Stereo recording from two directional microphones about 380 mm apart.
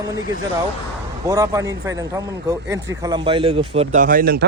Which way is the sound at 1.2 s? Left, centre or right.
Centre.